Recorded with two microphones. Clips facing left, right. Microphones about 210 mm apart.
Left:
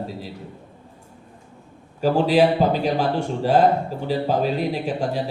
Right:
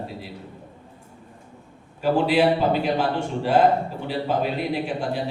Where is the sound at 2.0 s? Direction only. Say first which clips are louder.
Left 2 dB; 40° left (ahead or behind).